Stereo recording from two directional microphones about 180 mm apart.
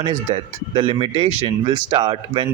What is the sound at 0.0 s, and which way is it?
A man's voice, 25° right (ahead or behind).